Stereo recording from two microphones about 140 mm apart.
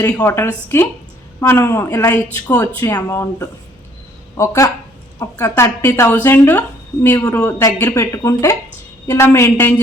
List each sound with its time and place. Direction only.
0.1 s a man's voice: 15° left (ahead or behind)